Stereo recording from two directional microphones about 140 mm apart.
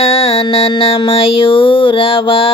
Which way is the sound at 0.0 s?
45° left (ahead or behind).